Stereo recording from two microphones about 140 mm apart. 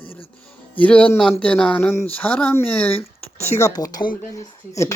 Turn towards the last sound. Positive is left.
turn(degrees=20)  # may be behind; listen again after turning